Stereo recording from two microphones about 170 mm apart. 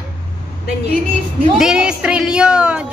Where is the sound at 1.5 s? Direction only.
5° right (ahead or behind).